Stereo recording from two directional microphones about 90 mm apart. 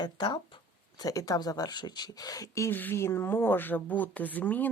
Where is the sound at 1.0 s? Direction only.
45° left (ahead or behind).